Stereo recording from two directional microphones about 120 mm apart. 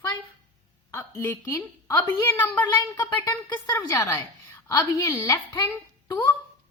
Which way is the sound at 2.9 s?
25° left (ahead or behind).